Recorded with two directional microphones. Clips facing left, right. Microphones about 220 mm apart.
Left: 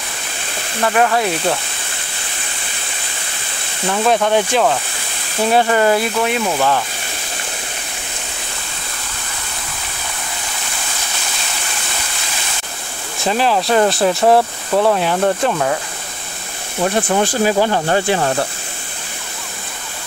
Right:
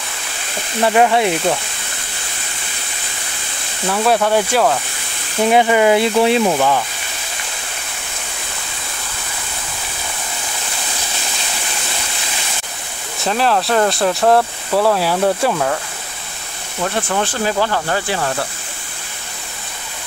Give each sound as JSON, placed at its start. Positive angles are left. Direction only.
{"t": 0.8, "sound": "speech", "side_deg": -20}
{"t": 3.9, "sound": "speech", "side_deg": 0}
{"t": 5.9, "sound": "speech", "side_deg": -30}
{"t": 6.4, "sound": "speech", "side_deg": -10}
{"t": 13.2, "sound": "speech", "side_deg": 0}
{"t": 16.8, "sound": "speech", "side_deg": 20}